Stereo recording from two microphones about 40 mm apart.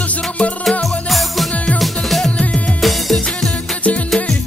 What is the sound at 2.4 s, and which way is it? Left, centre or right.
Music, left.